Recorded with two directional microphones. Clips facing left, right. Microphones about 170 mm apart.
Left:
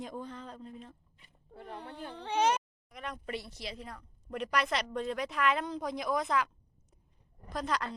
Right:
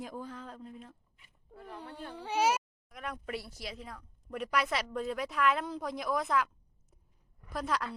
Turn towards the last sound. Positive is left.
turn(degrees=-5)  # may be behind; listen again after turning